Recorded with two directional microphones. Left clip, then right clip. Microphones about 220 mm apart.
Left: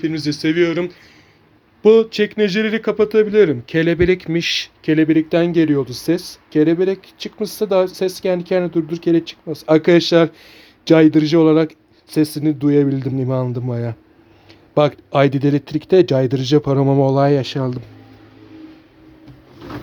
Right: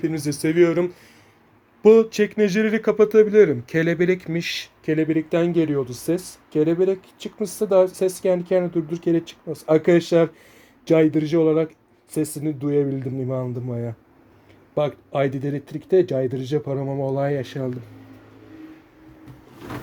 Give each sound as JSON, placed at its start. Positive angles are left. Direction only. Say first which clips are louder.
{"t": 0.0, "sound": "speech", "louder": "left 4 dB", "side_deg": -10}
{"t": 1.8, "sound": "speech", "louder": "left 2 dB", "side_deg": 5}